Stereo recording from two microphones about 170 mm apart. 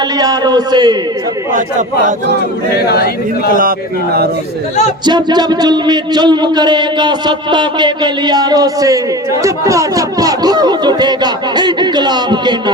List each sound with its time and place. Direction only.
0.2 s speech: 25° right (ahead or behind)
2.9 s speech: 70° left (ahead or behind)
3.5 s speech: 55° right (ahead or behind)
5.0 s speech: 25° right (ahead or behind)